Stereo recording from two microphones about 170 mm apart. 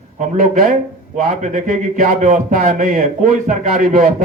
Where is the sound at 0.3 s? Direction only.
55° right (ahead or behind).